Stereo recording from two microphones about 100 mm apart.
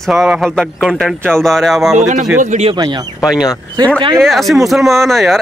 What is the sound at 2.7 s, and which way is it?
Speech, 45° right (ahead or behind).